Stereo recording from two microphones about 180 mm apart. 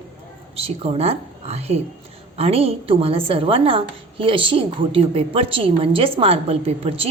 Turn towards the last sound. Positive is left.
turn(degrees=-35)  # may be behind; listen again after turning